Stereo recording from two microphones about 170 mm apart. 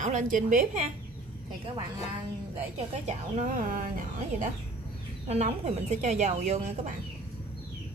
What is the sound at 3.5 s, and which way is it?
Speech, 55° right (ahead or behind).